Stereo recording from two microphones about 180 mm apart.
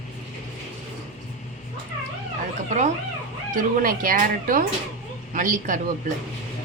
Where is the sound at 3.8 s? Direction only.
50° right (ahead or behind).